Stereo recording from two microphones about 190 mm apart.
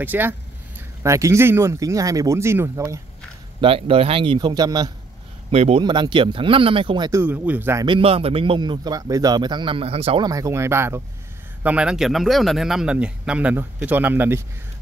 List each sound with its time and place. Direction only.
0.0 s speech: 10° right (ahead or behind)
3.6 s speech: 30° right (ahead or behind)
5.5 s speech: 35° right (ahead or behind); by 7.8 s 10° right (ahead or behind)
7.8 s speech: 30° right (ahead or behind); by 14.4 s 10° right (ahead or behind)